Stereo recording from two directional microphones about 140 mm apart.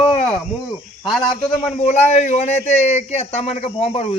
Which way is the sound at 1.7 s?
55° left (ahead or behind).